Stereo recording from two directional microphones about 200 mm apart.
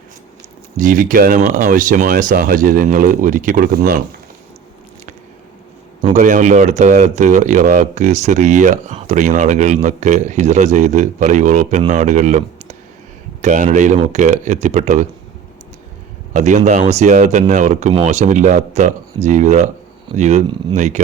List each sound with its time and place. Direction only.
0.8 s speech: 40° right (ahead or behind)
6.0 s speech: 35° right (ahead or behind)
16.3 s speech: 35° right (ahead or behind)